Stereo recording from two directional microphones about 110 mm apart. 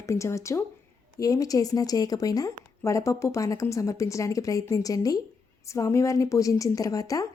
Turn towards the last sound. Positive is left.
turn(degrees=30)  # may be behind; listen again after turning